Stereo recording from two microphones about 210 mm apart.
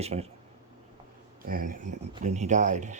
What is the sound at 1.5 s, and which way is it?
Speech, 40° right (ahead or behind).